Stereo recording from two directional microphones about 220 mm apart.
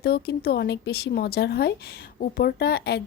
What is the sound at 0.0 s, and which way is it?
A woman's voice, 45° left (ahead or behind).